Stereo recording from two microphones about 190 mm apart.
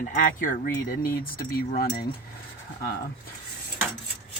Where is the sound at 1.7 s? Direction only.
50° left (ahead or behind).